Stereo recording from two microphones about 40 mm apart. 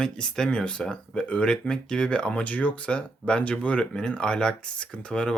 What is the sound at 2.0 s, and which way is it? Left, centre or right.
Speech, left.